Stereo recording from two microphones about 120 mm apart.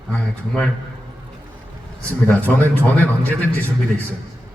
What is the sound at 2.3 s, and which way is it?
A woman's voice, 15° left (ahead or behind).